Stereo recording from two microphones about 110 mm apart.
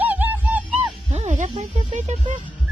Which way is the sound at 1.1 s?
85° right.